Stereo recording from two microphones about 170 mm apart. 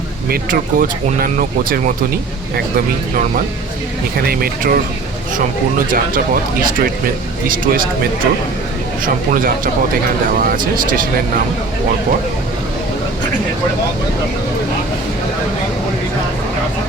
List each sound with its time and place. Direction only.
0.3 s speech: 55° right (ahead or behind)
4.2 s speech: 60° right (ahead or behind)
9.0 s speech: 55° right (ahead or behind)